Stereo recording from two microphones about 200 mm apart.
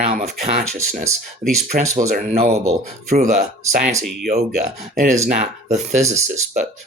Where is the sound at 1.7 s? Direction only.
35° right (ahead or behind).